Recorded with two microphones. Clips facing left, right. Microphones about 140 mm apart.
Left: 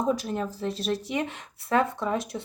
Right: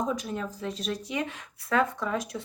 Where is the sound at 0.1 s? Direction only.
40° left (ahead or behind).